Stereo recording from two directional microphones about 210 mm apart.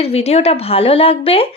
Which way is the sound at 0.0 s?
30° left (ahead or behind).